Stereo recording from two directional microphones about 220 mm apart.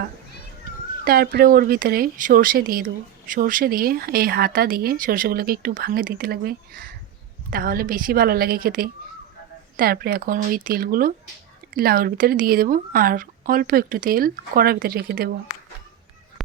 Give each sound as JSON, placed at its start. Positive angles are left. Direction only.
{"t": 1.0, "sound": "speech", "side_deg": -45}